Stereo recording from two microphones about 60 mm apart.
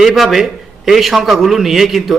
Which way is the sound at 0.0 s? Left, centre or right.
Centre.